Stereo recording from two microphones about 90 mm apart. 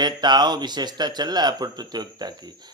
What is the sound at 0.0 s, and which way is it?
Speech, 55° right (ahead or behind).